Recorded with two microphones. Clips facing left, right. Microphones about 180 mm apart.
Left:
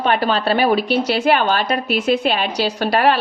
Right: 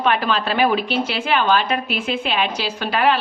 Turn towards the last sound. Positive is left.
turn(degrees=40)  # may be behind; listen again after turning